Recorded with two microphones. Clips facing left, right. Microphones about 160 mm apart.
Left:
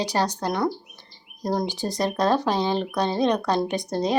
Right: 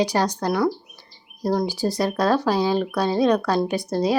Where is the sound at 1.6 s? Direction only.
10° right (ahead or behind).